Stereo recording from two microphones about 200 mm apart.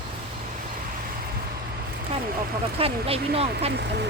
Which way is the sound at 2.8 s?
30° right (ahead or behind).